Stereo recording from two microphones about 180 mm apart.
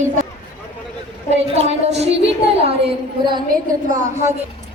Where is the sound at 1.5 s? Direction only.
35° right (ahead or behind).